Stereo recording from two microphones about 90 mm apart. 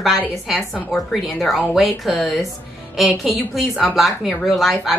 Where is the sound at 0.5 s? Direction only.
5° right (ahead or behind).